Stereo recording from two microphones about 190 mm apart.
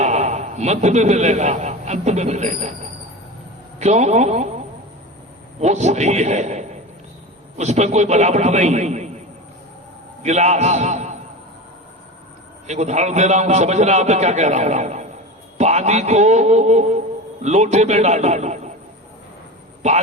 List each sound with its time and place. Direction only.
0.0 s a man's voice: 35° right (ahead or behind)
3.8 s a man's voice: 35° right (ahead or behind)
10.2 s a man's voice: 35° right (ahead or behind)
12.6 s a man's voice: 35° right (ahead or behind)
19.8 s a man's voice: 35° right (ahead or behind)